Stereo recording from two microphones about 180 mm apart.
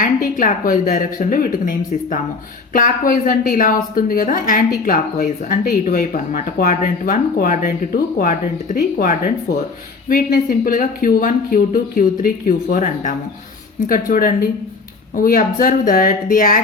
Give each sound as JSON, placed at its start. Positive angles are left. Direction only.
{"t": 0.0, "sound": "speech", "side_deg": 50}